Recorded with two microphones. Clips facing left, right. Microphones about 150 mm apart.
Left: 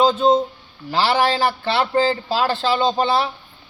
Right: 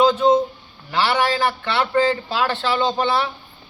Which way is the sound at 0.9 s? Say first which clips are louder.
Left 2 dB; 30° left (ahead or behind).